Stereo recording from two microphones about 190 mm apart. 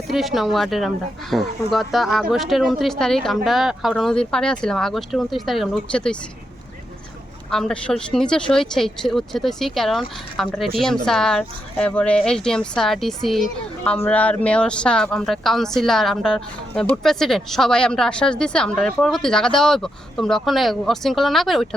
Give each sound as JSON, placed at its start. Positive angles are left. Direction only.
{"t": 0.1, "sound": "speech", "side_deg": 0}
{"t": 7.5, "sound": "speech", "side_deg": 5}